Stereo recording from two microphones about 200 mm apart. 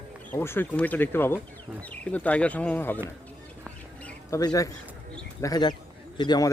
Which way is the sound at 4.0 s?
10° left (ahead or behind).